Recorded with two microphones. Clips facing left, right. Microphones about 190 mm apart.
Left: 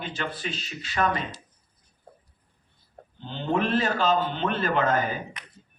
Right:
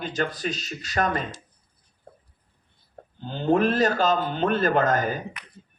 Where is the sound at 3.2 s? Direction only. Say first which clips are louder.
Right 5 dB; 45° right (ahead or behind).